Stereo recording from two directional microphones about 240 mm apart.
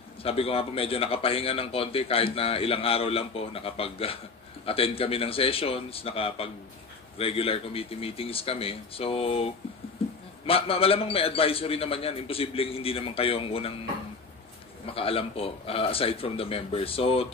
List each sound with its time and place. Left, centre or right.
0.2 s a man's voice: left
14.9 s a man's voice: left